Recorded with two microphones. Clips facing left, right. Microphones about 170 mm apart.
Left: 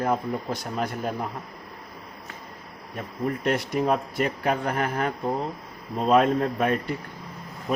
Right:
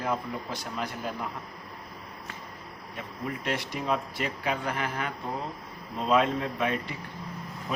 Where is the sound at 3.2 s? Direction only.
45° left (ahead or behind).